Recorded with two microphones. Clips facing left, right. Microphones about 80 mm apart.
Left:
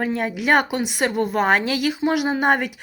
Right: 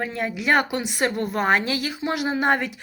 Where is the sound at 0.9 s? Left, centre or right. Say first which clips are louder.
Left 3 dB; centre.